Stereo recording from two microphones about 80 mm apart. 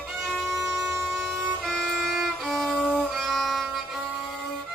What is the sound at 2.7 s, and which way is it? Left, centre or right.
Music, centre.